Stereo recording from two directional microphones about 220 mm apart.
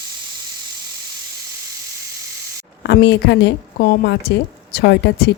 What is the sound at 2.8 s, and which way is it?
A woman's voice, 50° left (ahead or behind).